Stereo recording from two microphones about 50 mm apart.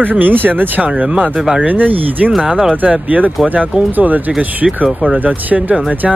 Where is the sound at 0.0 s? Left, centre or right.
Right.